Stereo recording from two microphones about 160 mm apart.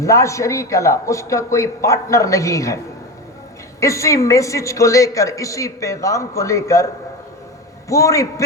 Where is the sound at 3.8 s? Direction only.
20° left (ahead or behind).